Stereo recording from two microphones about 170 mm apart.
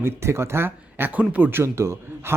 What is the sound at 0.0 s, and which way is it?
Speech, 15° right (ahead or behind).